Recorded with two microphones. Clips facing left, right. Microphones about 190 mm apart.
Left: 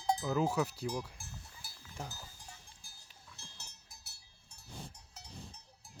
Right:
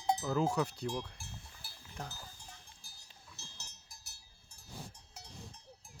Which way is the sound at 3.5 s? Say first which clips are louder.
Even; 60° left (ahead or behind).